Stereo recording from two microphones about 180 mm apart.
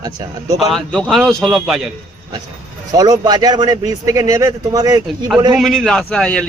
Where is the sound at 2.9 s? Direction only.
20° right (ahead or behind).